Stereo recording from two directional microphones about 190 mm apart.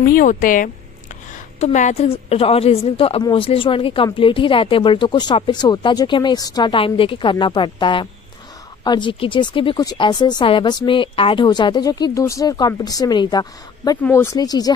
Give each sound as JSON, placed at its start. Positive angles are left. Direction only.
{"t": 0.0, "sound": "a woman's voice", "side_deg": 45}